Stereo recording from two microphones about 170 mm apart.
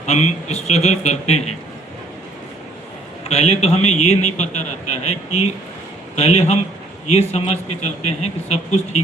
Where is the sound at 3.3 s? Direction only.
40° left (ahead or behind).